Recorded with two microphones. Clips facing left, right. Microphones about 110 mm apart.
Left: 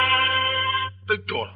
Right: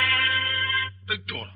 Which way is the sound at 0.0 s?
45° left (ahead or behind).